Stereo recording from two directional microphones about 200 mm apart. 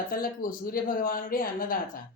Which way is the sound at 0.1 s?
45° left (ahead or behind).